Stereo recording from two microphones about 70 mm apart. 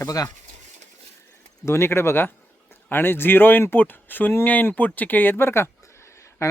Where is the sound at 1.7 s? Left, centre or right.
Left.